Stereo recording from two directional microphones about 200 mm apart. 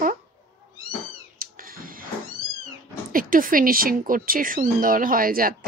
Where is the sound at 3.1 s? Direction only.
45° right (ahead or behind).